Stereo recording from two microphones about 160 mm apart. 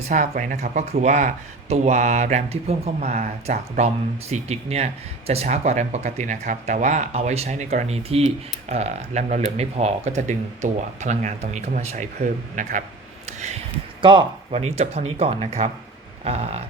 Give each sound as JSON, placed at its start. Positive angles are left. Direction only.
{"t": 0.1, "sound": "speech", "side_deg": -55}
{"t": 14.0, "sound": "speech", "side_deg": -30}
{"t": 14.6, "sound": "speech", "side_deg": -40}